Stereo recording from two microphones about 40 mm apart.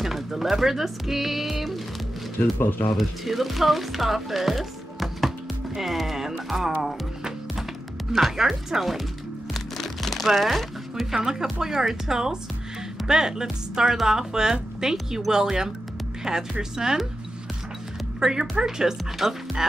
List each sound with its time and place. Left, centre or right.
0.0 s speech: centre
3.0 s speech: centre
8.1 s speech: centre
9.5 s music: centre
11.2 s speech: centre
18.2 s speech: centre